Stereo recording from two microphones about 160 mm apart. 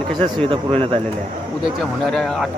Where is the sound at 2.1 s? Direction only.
5° left (ahead or behind).